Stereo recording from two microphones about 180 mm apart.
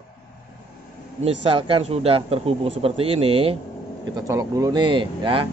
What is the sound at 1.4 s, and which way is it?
Speech, 30° right (ahead or behind).